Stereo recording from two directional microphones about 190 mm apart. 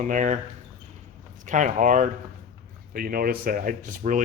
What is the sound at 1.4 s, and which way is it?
Speech, 40° right (ahead or behind).